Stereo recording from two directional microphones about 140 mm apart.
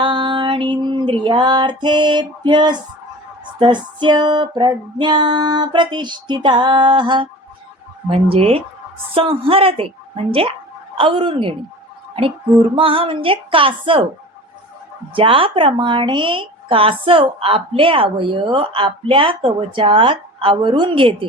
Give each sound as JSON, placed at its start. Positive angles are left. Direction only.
{"t": 0.0, "sound": "music", "side_deg": -35}
{"t": 3.6, "sound": "a woman's voice", "side_deg": -35}
{"t": 10.9, "sound": "a woman's voice", "side_deg": -40}
{"t": 12.7, "sound": "a woman's voice", "side_deg": -40}
{"t": 15.1, "sound": "a woman's voice", "side_deg": -40}